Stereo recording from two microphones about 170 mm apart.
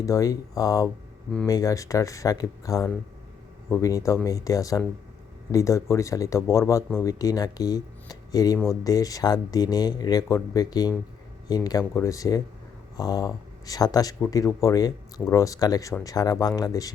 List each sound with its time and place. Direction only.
0.0 s speech: 20° left (ahead or behind)